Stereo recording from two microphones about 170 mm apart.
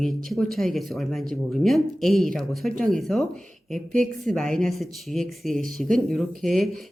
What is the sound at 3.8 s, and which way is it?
Speech, 50° right (ahead or behind).